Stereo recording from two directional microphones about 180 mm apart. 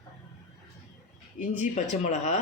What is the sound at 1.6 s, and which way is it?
Speech, 40° left (ahead or behind).